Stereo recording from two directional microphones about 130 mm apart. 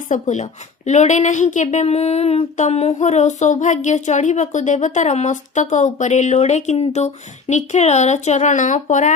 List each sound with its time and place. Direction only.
0.1 s a woman's voice: 65° left (ahead or behind)